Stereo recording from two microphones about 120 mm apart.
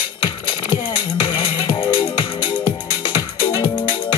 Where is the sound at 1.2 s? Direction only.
40° left (ahead or behind).